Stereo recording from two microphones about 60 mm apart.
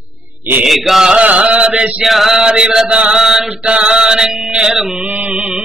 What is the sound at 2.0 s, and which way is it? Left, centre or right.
Chant, centre.